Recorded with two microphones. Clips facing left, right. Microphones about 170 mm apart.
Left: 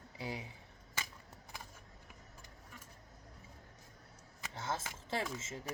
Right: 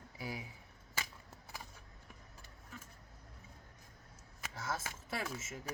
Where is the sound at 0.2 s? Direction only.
25° left (ahead or behind).